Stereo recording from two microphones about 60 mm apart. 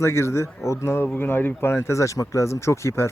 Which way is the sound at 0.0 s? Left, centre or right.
Left.